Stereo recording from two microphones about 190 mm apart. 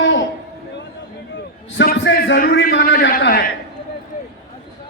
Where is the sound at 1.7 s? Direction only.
70° left (ahead or behind).